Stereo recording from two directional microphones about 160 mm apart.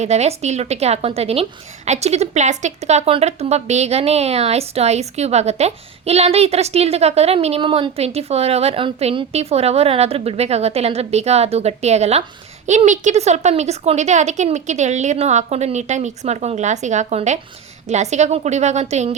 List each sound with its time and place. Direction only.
0.0 s a woman's voice: 45° right (ahead or behind)